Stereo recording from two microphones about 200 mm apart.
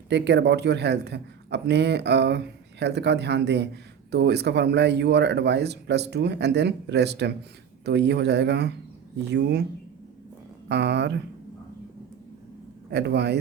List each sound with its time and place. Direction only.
0.1 s speech: 60° right (ahead or behind)
10.7 s speech: 60° right (ahead or behind)
12.9 s speech: 55° right (ahead or behind)